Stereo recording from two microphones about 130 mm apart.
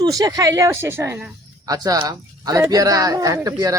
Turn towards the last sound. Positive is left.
turn(degrees=-25)  # may be behind; listen again after turning